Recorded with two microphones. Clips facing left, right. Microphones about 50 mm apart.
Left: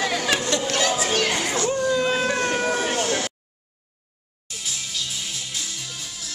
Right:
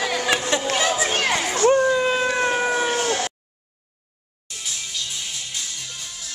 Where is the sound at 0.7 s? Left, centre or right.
Centre.